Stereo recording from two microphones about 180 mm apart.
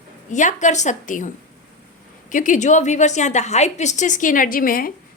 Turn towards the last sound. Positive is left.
turn(degrees=50)  # may be behind; listen again after turning